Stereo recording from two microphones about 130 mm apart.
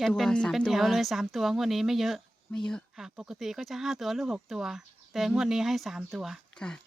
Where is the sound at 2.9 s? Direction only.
5° right (ahead or behind).